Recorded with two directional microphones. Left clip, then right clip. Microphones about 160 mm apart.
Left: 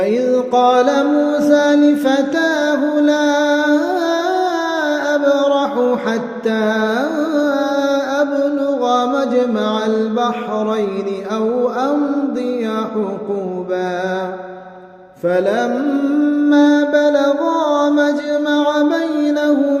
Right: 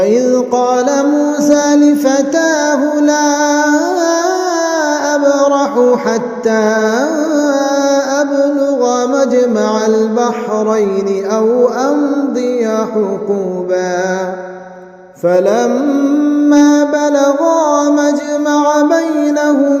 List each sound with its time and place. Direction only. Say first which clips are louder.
0.0 s music: right 4 dB; 40° right (ahead or behind)
5.1 s music: right 3 dB; 40° right (ahead or behind)
8.8 s mantra: right 4 dB; 40° right (ahead or behind)
15.3 s mantra: right 5 dB; 40° right (ahead or behind)
18.5 s music: right 6 dB; 40° right (ahead or behind)